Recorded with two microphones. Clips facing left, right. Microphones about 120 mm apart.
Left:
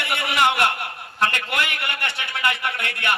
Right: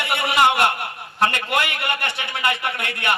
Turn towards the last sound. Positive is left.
turn(degrees=-20)  # may be behind; listen again after turning